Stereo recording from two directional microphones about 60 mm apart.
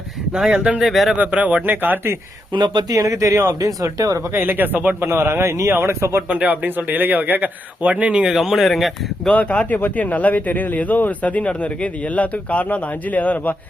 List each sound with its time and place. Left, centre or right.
0.5 s a man's voice: right
0.8 s speech: centre
1.4 s a man's voice: right
2.9 s speech: right
3.9 s speech: right
4.4 s speech: right
4.9 s speech: right
5.3 s speech: right
5.6 s speech: right
6.2 s a man's voice: right
8.2 s speech: centre
9.3 s speech: left